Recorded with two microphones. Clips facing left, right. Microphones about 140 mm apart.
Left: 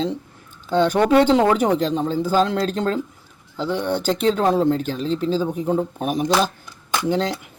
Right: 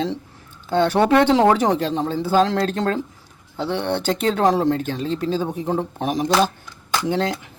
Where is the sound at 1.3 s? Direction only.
35° right (ahead or behind).